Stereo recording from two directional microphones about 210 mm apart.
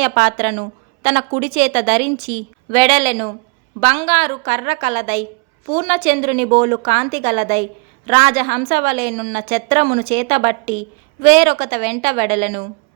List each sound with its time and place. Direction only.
0.0 s a woman's voice: 30° right (ahead or behind)